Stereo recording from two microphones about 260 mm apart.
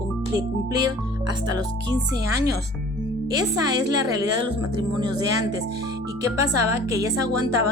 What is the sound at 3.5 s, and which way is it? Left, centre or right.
A woman's voice, centre.